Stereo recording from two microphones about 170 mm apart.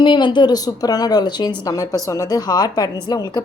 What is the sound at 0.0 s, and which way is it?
A woman's voice, 30° left (ahead or behind).